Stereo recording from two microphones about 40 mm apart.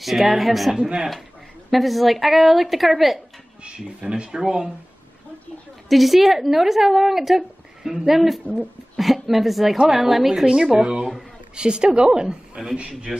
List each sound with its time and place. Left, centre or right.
0.0 s a woman's voice: centre
0.7 s a woman's voice: right
1.7 s a woman's voice: centre
3.6 s a woman's voice: right
5.9 s a woman's voice: centre
10.4 s a woman's voice: centre